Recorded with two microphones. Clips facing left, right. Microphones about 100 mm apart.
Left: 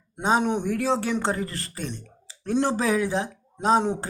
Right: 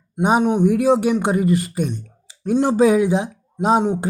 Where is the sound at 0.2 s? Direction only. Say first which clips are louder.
Right 7 dB; 15° right (ahead or behind).